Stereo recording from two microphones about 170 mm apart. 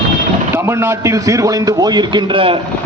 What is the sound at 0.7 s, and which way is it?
A man's voice, 15° right (ahead or behind).